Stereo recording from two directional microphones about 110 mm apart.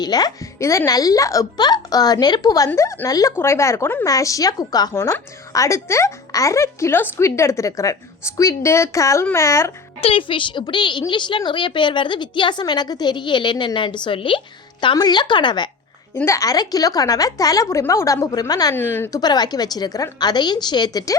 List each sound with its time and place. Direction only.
0.0 s a child's voice: 35° left (ahead or behind)
2.7 s a child's voice: 25° left (ahead or behind)
10.0 s a woman's voice: 55° left (ahead or behind)
14.9 s a woman's voice: 40° left (ahead or behind)
16.1 s a child's voice: 25° left (ahead or behind)
18.7 s speech: 20° left (ahead or behind)
19.1 s a child's voice: 40° left (ahead or behind)